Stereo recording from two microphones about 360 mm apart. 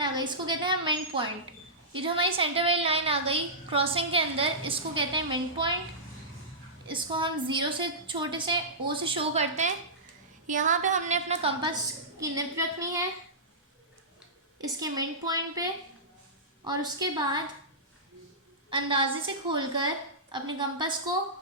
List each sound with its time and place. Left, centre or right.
0.0 s a woman's voice: centre
6.8 s a woman's voice: centre
14.6 s a woman's voice: centre
18.7 s a woman's voice: centre